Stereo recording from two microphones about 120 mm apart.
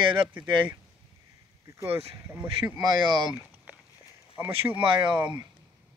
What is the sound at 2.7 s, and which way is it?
Speech, 35° right (ahead or behind).